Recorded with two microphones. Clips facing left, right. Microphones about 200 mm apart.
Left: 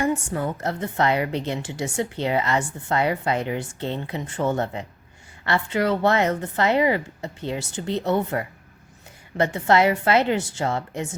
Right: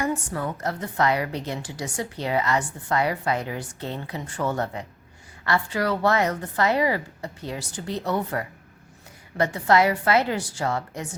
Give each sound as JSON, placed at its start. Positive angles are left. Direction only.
{"t": 0.0, "sound": "a woman's voice", "side_deg": 25}